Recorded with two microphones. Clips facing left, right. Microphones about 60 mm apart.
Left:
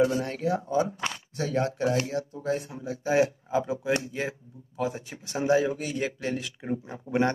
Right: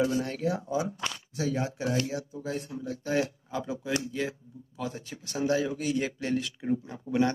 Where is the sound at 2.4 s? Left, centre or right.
Left.